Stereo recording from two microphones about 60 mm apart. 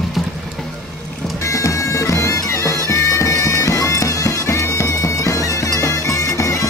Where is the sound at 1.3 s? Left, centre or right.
Left.